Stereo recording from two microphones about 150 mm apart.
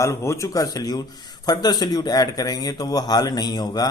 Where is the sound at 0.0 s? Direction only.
20° left (ahead or behind).